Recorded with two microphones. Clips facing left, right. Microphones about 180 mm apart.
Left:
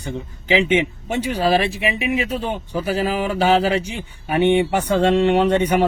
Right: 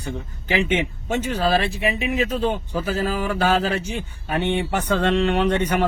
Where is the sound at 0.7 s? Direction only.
15° left (ahead or behind).